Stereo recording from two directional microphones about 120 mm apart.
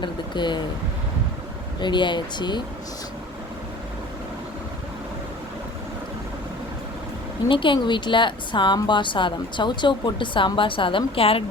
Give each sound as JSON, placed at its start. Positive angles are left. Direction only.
{"t": 0.0, "sound": "speech", "side_deg": 40}
{"t": 1.8, "sound": "speech", "side_deg": 40}
{"t": 7.4, "sound": "speech", "side_deg": 45}